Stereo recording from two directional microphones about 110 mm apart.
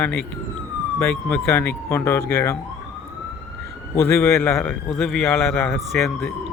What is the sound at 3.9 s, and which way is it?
Speech, 25° left (ahead or behind).